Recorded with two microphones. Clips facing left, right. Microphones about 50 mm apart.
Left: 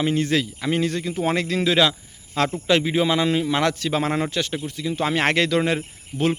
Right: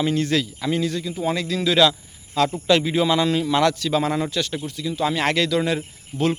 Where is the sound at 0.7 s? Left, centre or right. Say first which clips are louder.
Left 1 dB; left.